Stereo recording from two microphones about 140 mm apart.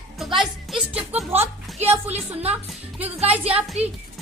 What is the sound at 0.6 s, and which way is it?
Speech, 5° right (ahead or behind).